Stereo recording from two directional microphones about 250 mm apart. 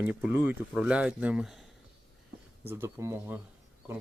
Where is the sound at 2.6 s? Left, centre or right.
Centre.